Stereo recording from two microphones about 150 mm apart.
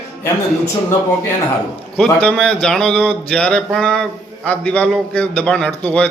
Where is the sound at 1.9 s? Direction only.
5° left (ahead or behind).